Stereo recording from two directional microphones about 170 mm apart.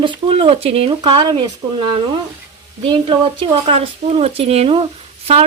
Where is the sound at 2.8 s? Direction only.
30° right (ahead or behind).